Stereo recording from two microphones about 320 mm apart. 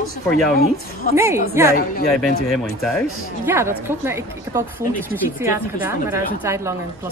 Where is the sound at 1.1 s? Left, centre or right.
Centre.